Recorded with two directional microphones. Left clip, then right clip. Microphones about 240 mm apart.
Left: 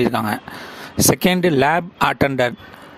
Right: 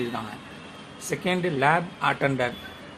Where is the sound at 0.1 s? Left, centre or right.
Left.